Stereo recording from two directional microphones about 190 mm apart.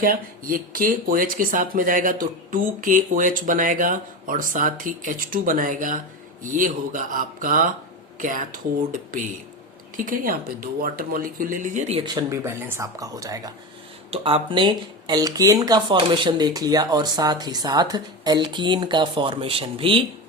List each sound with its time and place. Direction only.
0.0 s speech: 50° right (ahead or behind); by 12.1 s 30° right (ahead or behind)
12.1 s speech: 15° right (ahead or behind)
14.1 s speech: 30° right (ahead or behind)